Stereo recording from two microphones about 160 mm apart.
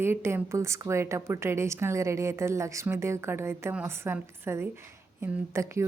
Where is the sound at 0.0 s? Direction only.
15° right (ahead or behind).